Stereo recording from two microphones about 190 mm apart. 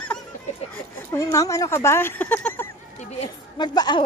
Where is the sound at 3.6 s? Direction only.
20° left (ahead or behind).